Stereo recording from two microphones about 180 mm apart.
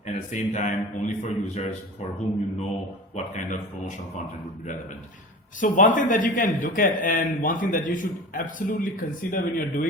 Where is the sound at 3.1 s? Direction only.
45° left (ahead or behind).